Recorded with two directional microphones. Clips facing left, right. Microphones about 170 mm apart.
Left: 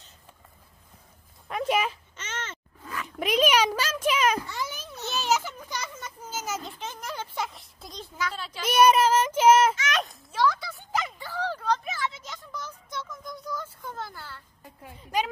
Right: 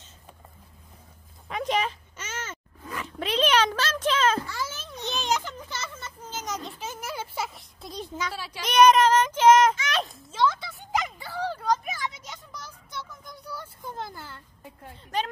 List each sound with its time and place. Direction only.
1.5 s speech: 5° left (ahead or behind)
2.1 s baby cry: 10° right (ahead or behind)
3.2 s a sound: 10° left (ahead or behind)
8.0 s speech: 15° right (ahead or behind)
8.6 s child singing: 5° left (ahead or behind)
9.8 s a sound: 30° right (ahead or behind)
14.8 s child singing: 10° left (ahead or behind)